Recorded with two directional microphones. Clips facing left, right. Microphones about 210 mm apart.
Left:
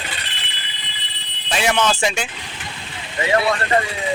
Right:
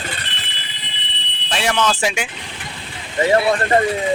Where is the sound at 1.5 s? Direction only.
Centre (ahead or behind).